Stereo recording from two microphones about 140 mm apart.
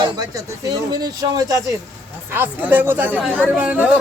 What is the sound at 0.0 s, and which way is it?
A man's voice, 25° right (ahead or behind).